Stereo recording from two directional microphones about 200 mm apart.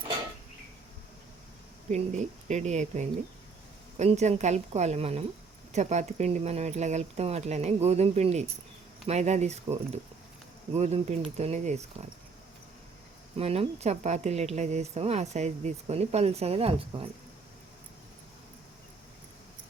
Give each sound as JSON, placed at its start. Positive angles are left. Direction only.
{"t": 1.9, "sound": "a woman's voice", "side_deg": -35}
{"t": 13.3, "sound": "a woman's voice", "side_deg": -30}